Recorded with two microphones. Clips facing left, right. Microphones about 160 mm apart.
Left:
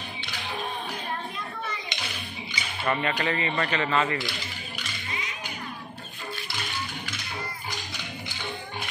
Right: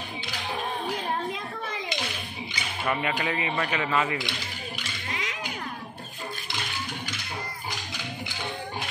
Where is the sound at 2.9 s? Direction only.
10° right (ahead or behind).